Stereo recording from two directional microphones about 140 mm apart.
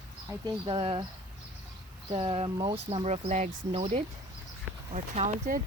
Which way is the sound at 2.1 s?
45° right (ahead or behind).